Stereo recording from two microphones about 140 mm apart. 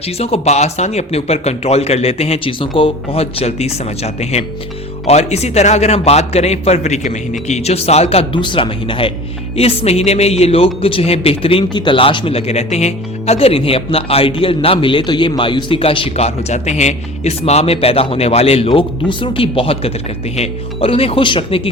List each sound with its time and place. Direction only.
0.0 s a man's voice: 45° left (ahead or behind)
8.1 s a man's voice: 40° left (ahead or behind)